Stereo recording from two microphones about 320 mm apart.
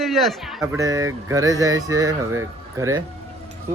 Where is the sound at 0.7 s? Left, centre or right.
Centre.